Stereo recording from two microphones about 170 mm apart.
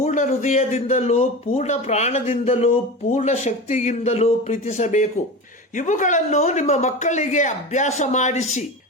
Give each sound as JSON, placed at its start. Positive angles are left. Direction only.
{"t": 0.0, "sound": "speech", "side_deg": 45}